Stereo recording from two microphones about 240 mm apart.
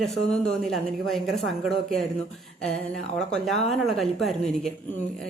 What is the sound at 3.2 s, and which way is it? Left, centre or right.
A woman's voice, centre.